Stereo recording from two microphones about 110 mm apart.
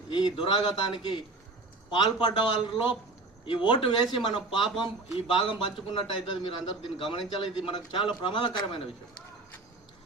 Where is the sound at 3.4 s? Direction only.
45° left (ahead or behind).